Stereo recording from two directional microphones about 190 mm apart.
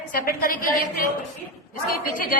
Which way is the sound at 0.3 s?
45° left (ahead or behind).